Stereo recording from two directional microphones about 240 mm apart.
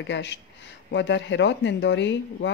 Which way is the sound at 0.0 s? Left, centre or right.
Left.